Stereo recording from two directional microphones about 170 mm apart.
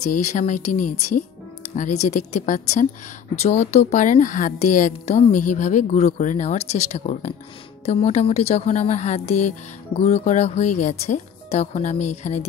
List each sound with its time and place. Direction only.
0.0 s a woman's voice: 45° left (ahead or behind)